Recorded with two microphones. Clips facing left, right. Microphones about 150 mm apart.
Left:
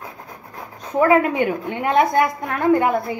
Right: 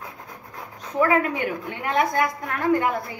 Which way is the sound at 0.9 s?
25° left (ahead or behind).